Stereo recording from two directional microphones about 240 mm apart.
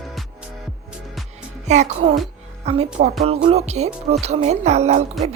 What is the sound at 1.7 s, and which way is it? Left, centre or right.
Speech, right.